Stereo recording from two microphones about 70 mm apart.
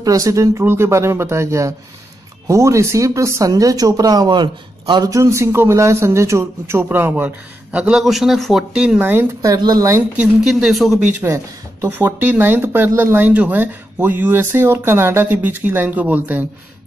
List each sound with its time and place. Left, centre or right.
0.0 s a man's voice: right
0.7 s a man's voice: right
3.4 s speech: right
5.1 s a man's voice: right
6.8 s speech: right
7.9 s a man's voice: centre
8.7 s speech: centre
9.0 s speech: right
9.4 s speech: right
10.4 s a man's voice: centre
11.2 s speech: right
11.9 s speech: right